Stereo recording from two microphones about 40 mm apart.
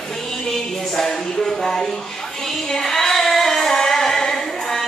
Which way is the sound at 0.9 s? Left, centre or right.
Centre.